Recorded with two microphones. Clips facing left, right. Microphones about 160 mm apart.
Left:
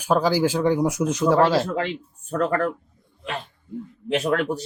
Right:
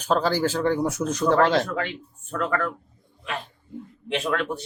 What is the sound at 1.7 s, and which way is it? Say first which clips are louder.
A man's voice: left 3 dB; 30° left (ahead or behind).